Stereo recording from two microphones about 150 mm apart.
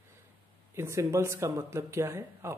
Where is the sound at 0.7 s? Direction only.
20° right (ahead or behind).